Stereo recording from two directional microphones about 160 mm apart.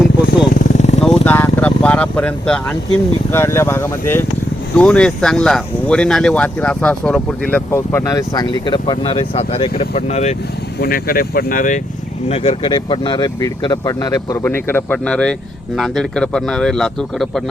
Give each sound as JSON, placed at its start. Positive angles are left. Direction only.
{"t": 0.3, "sound": "vehicle", "side_deg": 60}
{"t": 1.0, "sound": "vehicle", "side_deg": 5}
{"t": 3.3, "sound": "speech", "side_deg": 15}
{"t": 10.8, "sound": "speech", "side_deg": 65}
{"t": 12.3, "sound": "speech", "side_deg": 40}